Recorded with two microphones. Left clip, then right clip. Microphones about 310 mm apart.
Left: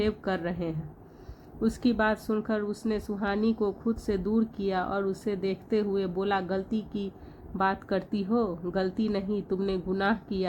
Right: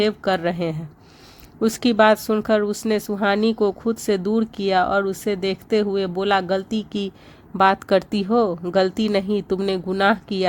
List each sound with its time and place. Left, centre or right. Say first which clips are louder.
0.0 s speech: right 9 dB; right